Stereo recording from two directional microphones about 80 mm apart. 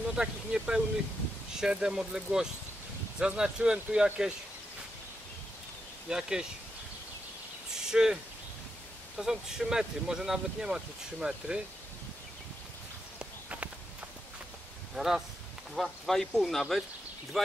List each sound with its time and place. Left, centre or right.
0.1 s speech: centre
6.0 s speech: centre
7.7 s a sound: centre
9.1 s speech: centre
13.2 s walk: centre
15.0 s speech: centre